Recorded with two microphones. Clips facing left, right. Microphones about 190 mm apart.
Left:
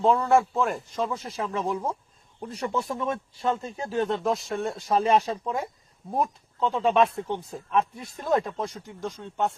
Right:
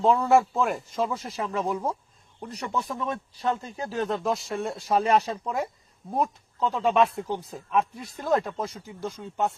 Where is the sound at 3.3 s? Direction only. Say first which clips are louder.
Left 1 dB; 25° left (ahead or behind).